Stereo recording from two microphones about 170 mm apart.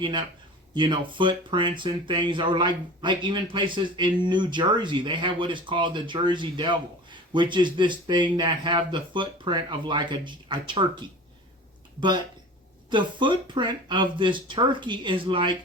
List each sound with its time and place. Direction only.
0.0 s speech: 30° right (ahead or behind)
11.9 s speech: 25° right (ahead or behind)